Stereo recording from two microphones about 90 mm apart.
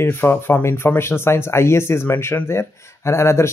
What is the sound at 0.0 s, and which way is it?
Speech, 25° left (ahead or behind).